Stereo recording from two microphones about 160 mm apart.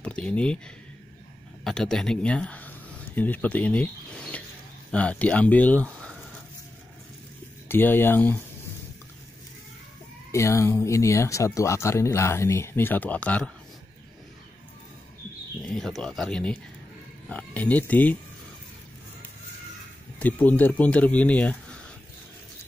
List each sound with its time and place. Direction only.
0.0 s speech: 5° left (ahead or behind)
1.6 s speech: 5° left (ahead or behind)
7.6 s speech: 15° left (ahead or behind)
10.3 s speech: 20° left (ahead or behind)
15.6 s speech: 5° left (ahead or behind)
20.2 s speech: 10° left (ahead or behind)